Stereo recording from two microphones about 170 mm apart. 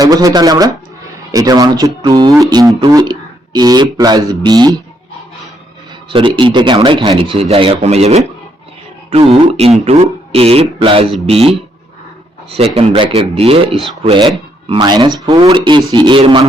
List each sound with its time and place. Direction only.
0.0 s speech: 20° right (ahead or behind)
6.1 s speech: 30° right (ahead or behind)